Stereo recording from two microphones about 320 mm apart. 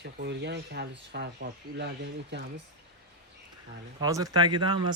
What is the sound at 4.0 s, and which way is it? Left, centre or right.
Speech, centre.